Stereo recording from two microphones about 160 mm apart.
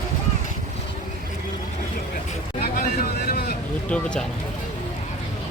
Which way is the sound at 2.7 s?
65° left (ahead or behind).